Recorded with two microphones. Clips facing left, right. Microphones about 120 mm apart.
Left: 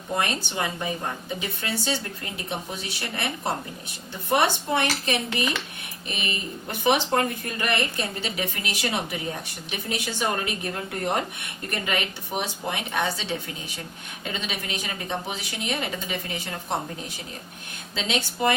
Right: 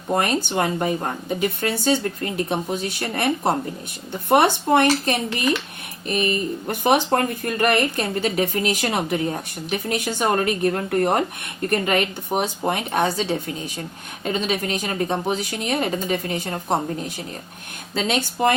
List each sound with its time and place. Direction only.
0.1 s speech: 50° right (ahead or behind)
17.9 s speech: 50° right (ahead or behind)